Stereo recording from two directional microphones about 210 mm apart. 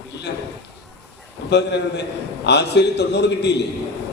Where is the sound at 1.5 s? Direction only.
55° left (ahead or behind).